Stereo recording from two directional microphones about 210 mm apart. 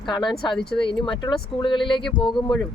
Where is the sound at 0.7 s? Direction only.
25° left (ahead or behind).